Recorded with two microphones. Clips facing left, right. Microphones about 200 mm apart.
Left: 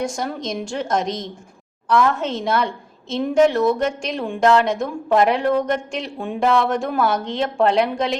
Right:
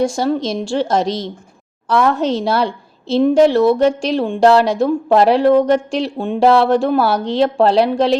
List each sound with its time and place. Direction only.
0.0 s a woman's voice: 30° right (ahead or behind)